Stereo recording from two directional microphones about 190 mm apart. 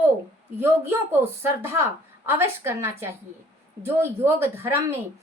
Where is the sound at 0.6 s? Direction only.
10° right (ahead or behind).